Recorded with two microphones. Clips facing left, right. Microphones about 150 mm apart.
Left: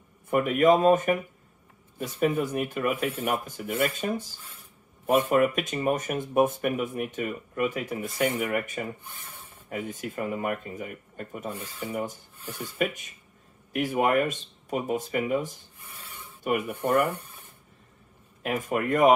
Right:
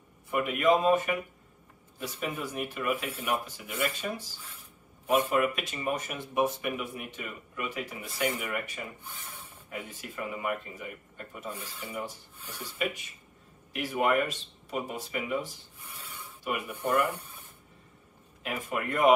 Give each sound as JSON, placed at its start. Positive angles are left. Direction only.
{"t": 0.3, "sound": "speech", "side_deg": 45}
{"t": 9.0, "sound": "speech", "side_deg": 10}
{"t": 9.7, "sound": "speech", "side_deg": 45}
{"t": 18.4, "sound": "speech", "side_deg": 45}